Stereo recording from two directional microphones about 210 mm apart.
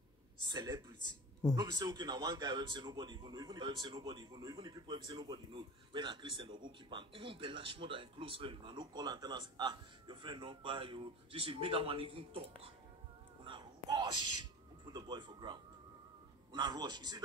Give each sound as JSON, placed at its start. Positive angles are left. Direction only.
{"t": 0.5, "sound": "a man's voice", "side_deg": -20}
{"t": 13.4, "sound": "a sound", "side_deg": -20}
{"t": 16.5, "sound": "a man's voice", "side_deg": -20}